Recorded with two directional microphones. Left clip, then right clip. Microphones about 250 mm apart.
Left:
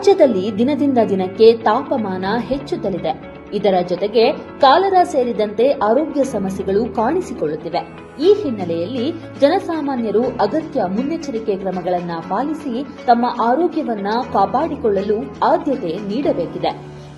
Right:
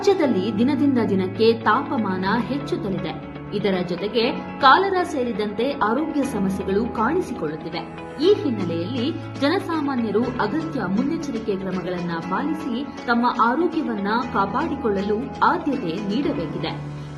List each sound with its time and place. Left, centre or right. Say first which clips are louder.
0.0 s a woman's voice: left 7 dB; centre